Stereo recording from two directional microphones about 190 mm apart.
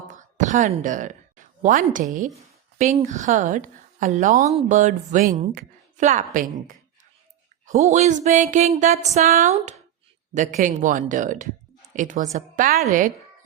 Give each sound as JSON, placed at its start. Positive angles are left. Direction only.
{"t": 0.1, "sound": "a woman's voice", "side_deg": -40}